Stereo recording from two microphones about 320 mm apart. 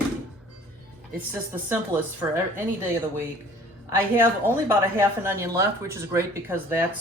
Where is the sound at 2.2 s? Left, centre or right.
Centre.